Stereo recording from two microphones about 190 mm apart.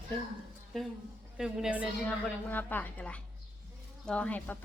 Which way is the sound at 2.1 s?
10° left (ahead or behind).